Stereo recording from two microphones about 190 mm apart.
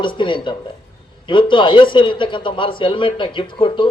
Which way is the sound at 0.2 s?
25° left (ahead or behind).